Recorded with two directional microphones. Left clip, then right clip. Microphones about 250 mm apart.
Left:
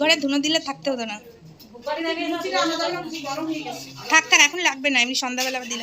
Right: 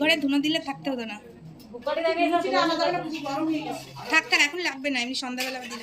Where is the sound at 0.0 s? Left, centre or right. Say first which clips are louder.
Left 3 dB; centre.